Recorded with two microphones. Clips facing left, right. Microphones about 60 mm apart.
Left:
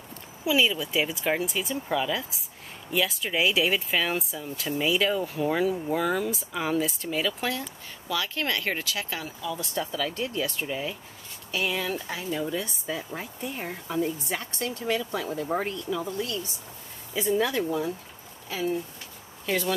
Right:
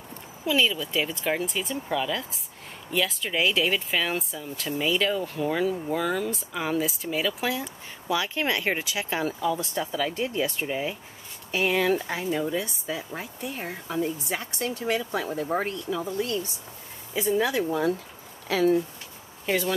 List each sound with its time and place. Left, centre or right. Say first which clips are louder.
0.5 s speech: even; centre
7.6 s speech: right 4 dB; centre
9.2 s speech: right 7 dB; right
9.8 s speech: right 2 dB; centre
11.5 s speech: right 5 dB; right
12.4 s speech: right 2 dB; centre
14.4 s speech: right 2 dB; right
15.5 s speech: right 1 dB; centre
16.1 s speech: right 3 dB; right
17.3 s speech: right 1 dB; centre
18.5 s speech: right 7 dB; right
19.4 s speech: right 2 dB; right